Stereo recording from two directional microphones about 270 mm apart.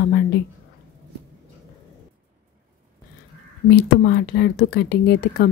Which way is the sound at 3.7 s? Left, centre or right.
Left.